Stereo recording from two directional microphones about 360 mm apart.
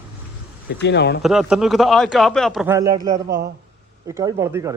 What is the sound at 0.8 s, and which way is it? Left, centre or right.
Speech, left.